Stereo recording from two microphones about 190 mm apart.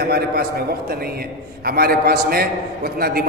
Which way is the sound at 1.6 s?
55° right (ahead or behind).